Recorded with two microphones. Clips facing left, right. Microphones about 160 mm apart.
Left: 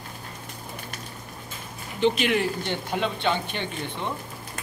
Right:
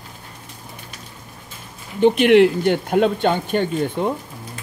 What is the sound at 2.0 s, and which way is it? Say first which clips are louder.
Speech: right 10 dB; 60° right (ahead or behind).